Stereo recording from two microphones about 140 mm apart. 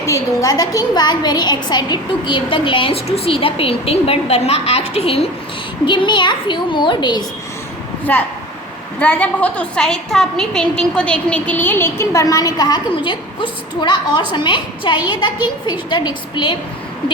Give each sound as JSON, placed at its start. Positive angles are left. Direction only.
{"t": 0.0, "sound": "a woman's voice", "side_deg": 25}
{"t": 5.8, "sound": "a woman's voice", "side_deg": 35}
{"t": 8.1, "sound": "a woman's voice", "side_deg": 10}